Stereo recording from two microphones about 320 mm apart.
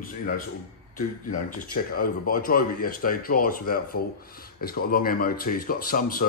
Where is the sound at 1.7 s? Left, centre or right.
Left.